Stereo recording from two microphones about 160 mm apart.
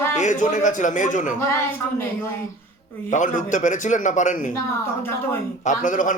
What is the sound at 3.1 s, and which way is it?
A man's voice, 50° left (ahead or behind).